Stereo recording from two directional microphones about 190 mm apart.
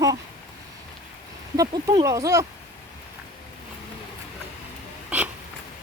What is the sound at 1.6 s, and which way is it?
Speech, 20° right (ahead or behind).